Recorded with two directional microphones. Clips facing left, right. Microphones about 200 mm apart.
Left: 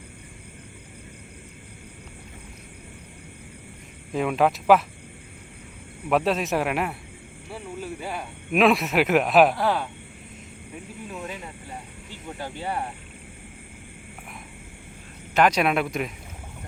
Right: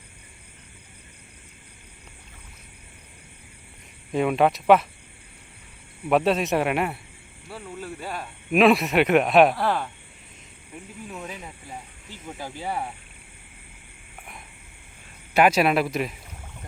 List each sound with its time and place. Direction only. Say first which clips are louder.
4.1 s speech: right 1 dB; centre (ahead or behind)
6.1 s speech: right 2 dB; centre (ahead or behind)
11.1 s speech: left 2 dB; centre (ahead or behind)
15.4 s speech: right 2 dB; 5° right (ahead or behind)